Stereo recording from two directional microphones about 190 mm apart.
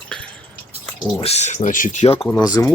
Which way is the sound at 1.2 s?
35° left (ahead or behind).